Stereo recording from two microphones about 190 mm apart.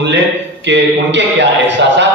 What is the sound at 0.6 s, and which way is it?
A man's voice, 70° right (ahead or behind).